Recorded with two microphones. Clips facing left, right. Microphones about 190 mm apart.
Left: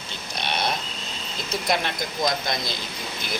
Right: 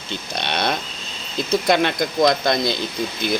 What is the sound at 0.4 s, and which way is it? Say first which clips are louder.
Speech: right 3 dB; 90° right.